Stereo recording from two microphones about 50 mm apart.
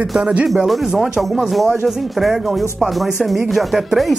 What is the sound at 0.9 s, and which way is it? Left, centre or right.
Speech, centre.